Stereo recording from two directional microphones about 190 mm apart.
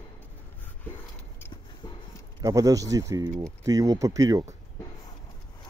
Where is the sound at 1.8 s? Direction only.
20° left (ahead or behind).